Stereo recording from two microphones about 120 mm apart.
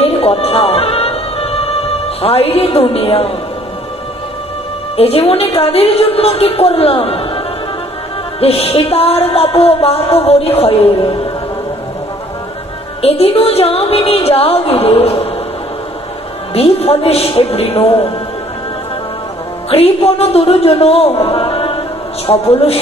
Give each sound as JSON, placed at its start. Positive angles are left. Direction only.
{"t": 0.0, "sound": "music", "side_deg": 55}
{"t": 4.9, "sound": "music", "side_deg": 55}
{"t": 13.0, "sound": "music", "side_deg": 55}
{"t": 16.5, "sound": "music", "side_deg": 55}
{"t": 19.7, "sound": "a man's voice", "side_deg": 55}